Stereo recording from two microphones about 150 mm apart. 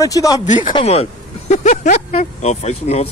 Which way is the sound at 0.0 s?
25° left (ahead or behind).